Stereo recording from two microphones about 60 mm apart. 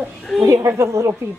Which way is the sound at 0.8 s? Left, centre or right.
Right.